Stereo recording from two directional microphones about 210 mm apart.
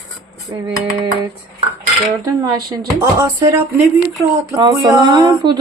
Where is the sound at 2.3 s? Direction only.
20° right (ahead or behind).